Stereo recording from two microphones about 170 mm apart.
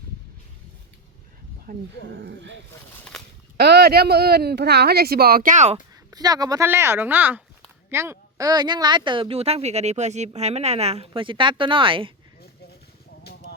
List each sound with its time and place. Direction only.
1.7 s speech: 60° right (ahead or behind)
2.1 s speech: 80° right
3.1 s a sound: centre (ahead or behind)
3.6 s speech: 70° right (ahead or behind); by 5.7 s 45° right (ahead or behind)
5.7 s speech: 20° right (ahead or behind)